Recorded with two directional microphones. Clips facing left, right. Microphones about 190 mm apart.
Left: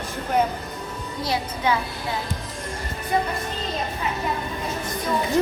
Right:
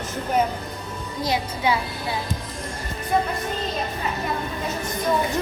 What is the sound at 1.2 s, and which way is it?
Speech, 10° right (ahead or behind).